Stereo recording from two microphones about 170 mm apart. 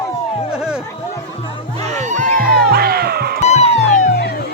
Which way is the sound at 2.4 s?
65° right (ahead or behind).